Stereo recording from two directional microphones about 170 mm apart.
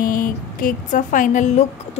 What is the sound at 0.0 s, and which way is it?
Music, 55° left (ahead or behind).